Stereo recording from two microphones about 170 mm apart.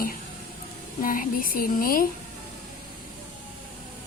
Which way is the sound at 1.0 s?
55° left (ahead or behind).